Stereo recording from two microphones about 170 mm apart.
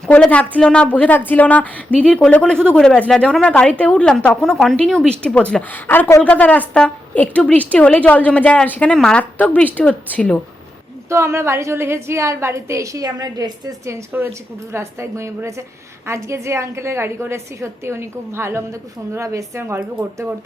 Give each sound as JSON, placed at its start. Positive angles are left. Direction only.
{"t": 0.0, "sound": "a woman's voice", "side_deg": 5}
{"t": 11.1, "sound": "a woman's voice", "side_deg": -15}